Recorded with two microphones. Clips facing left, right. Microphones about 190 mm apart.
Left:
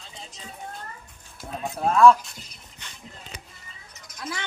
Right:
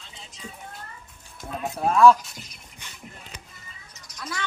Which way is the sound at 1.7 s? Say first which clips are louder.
Even; centre (ahead or behind).